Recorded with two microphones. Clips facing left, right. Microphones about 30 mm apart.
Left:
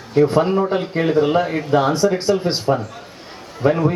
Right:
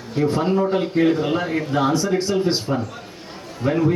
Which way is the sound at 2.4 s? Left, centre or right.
Centre.